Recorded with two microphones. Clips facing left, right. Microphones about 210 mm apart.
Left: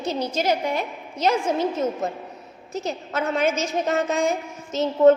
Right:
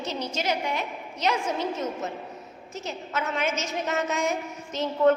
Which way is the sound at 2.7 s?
35° left (ahead or behind).